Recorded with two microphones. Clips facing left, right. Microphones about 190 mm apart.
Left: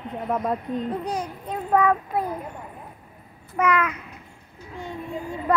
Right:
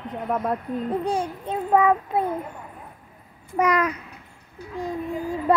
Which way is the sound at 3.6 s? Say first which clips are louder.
Right 1 dB; 35° right (ahead or behind).